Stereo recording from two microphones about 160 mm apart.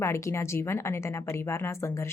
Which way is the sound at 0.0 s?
15° left (ahead or behind).